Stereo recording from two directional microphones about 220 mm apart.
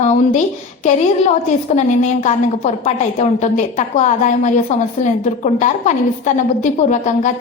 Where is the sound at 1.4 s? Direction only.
35° left (ahead or behind).